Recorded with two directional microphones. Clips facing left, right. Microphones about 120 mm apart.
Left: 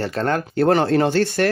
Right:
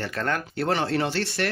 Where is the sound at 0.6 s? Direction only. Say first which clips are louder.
Left 9 dB; 45° left (ahead or behind).